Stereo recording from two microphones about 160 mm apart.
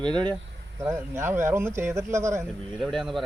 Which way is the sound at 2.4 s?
Centre (ahead or behind).